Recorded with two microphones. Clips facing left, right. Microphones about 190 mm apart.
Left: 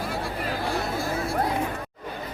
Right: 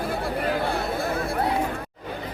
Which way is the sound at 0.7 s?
60° right (ahead or behind).